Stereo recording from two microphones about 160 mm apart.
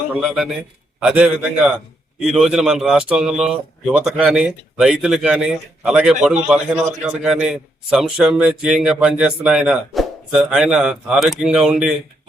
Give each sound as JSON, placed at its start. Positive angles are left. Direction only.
{"t": 0.2, "sound": "a man's voice", "side_deg": -5}